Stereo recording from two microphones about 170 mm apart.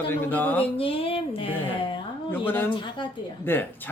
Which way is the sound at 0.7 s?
35° left (ahead or behind).